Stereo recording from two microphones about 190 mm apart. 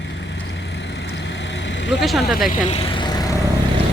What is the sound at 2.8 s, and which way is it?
Vehicle, 25° left (ahead or behind).